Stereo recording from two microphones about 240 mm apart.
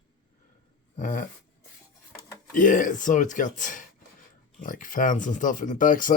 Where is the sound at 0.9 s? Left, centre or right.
Left.